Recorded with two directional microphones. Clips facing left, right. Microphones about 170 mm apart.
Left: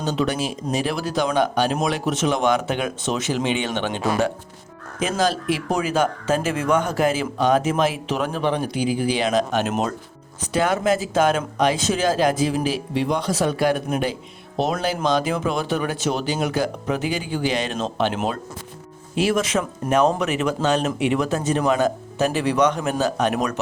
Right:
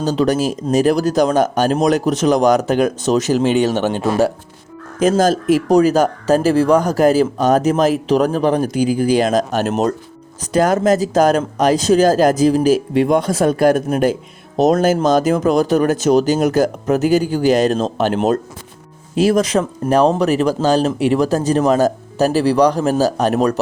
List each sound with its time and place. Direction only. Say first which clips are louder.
0.0 s speech: right 7 dB; 35° right (ahead or behind)